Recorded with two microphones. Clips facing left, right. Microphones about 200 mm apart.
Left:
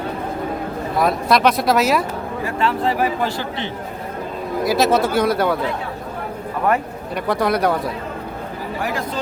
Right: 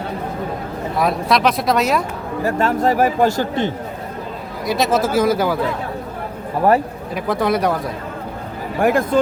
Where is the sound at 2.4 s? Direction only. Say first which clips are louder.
Right 4 dB; 45° right (ahead or behind).